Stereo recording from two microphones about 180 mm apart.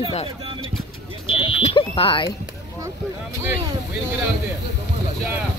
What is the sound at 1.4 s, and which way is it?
Smoke detector, 30° left (ahead or behind).